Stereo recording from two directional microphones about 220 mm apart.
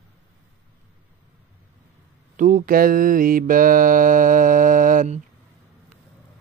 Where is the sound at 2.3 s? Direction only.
35° right (ahead or behind).